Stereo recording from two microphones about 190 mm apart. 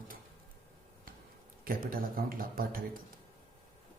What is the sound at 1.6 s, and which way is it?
A man's voice, 50° right (ahead or behind).